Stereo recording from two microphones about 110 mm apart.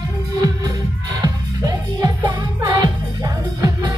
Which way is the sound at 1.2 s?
35° right (ahead or behind).